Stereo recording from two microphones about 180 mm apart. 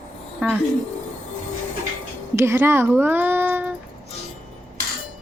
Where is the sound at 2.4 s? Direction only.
15° right (ahead or behind).